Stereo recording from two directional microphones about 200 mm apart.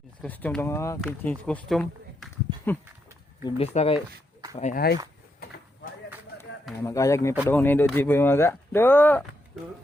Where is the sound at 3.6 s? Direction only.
30° left (ahead or behind).